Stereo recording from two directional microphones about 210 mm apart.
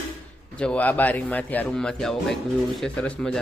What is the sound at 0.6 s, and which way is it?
Speech, 5° left (ahead or behind).